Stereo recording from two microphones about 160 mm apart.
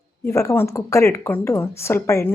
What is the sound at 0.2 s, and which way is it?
Speech, 20° left (ahead or behind).